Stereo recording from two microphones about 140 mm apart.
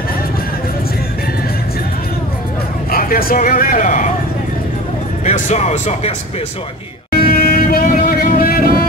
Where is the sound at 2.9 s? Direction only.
90° left; by 4.1 s 70° left (ahead or behind).